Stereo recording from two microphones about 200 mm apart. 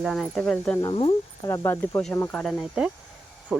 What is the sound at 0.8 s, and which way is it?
Speech, 25° left (ahead or behind).